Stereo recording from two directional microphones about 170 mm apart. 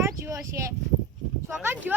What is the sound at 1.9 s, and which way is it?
Speech, 10° right (ahead or behind).